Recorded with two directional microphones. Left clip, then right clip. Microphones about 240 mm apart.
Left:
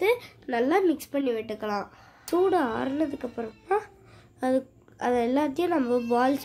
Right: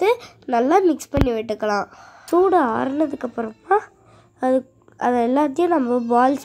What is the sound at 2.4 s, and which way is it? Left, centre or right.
A woman's voice, centre.